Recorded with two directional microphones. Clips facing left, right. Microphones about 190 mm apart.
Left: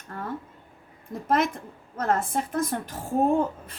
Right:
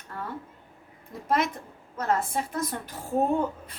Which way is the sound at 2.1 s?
50° left (ahead or behind).